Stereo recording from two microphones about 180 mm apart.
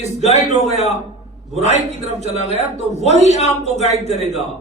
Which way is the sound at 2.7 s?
40° left (ahead or behind).